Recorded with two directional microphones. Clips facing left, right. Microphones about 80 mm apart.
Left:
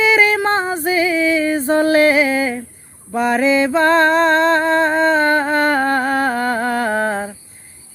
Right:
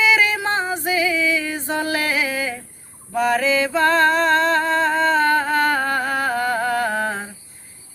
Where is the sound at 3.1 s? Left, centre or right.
Left.